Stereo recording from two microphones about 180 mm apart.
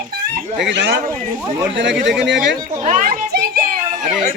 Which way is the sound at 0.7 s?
70° right (ahead or behind).